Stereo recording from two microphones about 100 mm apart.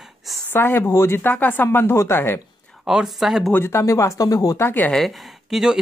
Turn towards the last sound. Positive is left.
turn(degrees=-5)  # may be behind; listen again after turning